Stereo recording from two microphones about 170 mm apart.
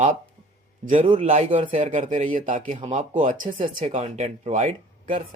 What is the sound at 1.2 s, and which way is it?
Speech, 40° right (ahead or behind).